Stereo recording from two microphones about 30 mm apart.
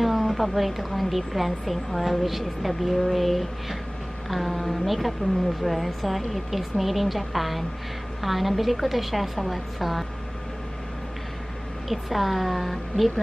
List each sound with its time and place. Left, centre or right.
0.0 s a woman's voice: centre
11.9 s a woman's voice: centre